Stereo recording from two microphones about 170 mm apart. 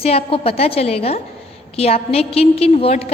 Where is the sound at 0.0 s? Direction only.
35° left (ahead or behind).